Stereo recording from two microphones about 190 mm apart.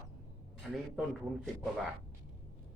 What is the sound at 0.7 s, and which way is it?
Speech, centre (ahead or behind).